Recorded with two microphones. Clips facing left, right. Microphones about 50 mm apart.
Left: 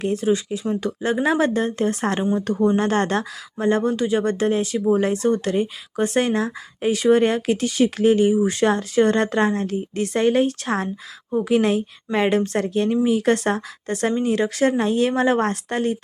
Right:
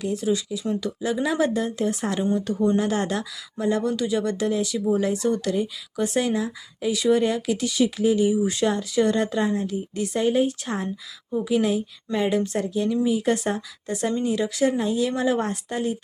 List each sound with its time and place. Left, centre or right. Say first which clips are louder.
0.0 s speech: left 4 dB; left